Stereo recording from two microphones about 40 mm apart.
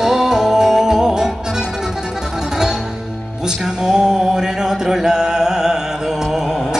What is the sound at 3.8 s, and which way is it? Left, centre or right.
Music, centre.